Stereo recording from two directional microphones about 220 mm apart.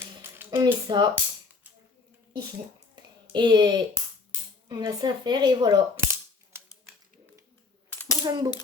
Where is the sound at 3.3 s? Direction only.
20° right (ahead or behind).